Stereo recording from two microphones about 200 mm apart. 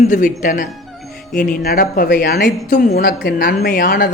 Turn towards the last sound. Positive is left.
turn(degrees=45)  # may be behind; listen again after turning